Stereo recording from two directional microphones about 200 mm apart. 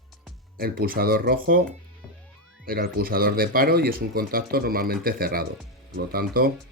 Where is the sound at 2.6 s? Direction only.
45° right (ahead or behind).